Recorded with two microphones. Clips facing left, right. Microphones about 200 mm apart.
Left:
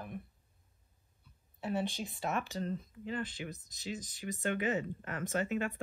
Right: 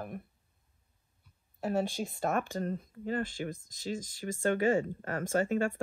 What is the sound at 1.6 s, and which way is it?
Speech, 50° right (ahead or behind).